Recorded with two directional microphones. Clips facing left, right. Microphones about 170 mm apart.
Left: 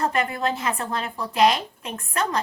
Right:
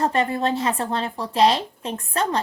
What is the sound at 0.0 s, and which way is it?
A woman's voice, 30° right (ahead or behind).